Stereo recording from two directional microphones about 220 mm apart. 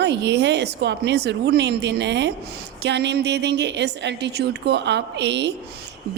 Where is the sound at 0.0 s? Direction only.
50° right (ahead or behind).